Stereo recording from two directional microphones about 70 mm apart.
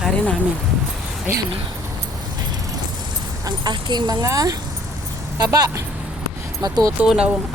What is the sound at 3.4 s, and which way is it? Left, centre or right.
Speech, right.